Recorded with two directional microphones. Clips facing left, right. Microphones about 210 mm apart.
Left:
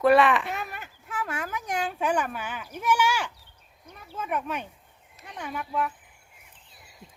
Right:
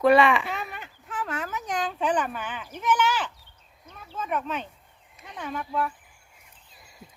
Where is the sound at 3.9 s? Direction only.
10° left (ahead or behind).